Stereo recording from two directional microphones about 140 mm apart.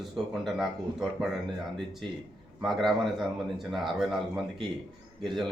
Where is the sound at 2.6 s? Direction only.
Centre (ahead or behind).